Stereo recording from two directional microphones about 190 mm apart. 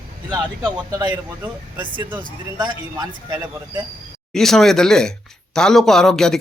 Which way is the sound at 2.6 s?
20° right (ahead or behind).